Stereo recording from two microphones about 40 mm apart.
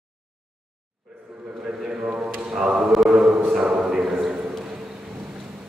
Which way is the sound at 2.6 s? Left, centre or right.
Right.